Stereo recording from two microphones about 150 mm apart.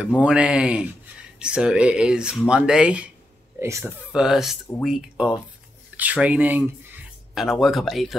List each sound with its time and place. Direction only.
0.2 s speech: 5° right (ahead or behind)
3.5 s speech: 20° right (ahead or behind)
4.1 s speech: 5° right (ahead or behind)